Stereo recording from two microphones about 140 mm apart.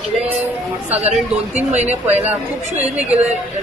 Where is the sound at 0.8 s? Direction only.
50° right (ahead or behind).